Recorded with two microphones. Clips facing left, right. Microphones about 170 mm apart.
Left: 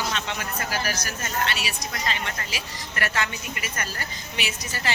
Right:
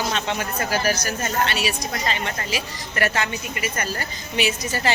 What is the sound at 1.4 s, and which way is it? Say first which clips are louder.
Speech: right 5 dB; 30° right (ahead or behind).